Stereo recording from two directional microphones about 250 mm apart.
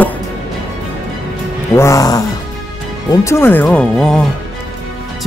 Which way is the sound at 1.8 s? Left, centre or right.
Centre.